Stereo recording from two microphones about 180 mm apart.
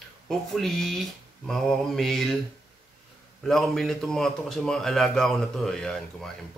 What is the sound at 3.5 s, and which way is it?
A man's voice, centre (ahead or behind).